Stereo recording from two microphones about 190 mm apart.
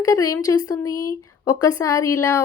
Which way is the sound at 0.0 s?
15° left (ahead or behind).